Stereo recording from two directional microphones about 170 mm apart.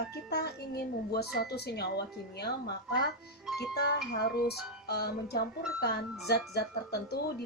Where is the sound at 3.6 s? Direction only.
75° left (ahead or behind).